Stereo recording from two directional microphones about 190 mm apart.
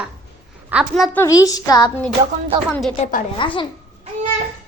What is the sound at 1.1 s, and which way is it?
Speech, 15° left (ahead or behind).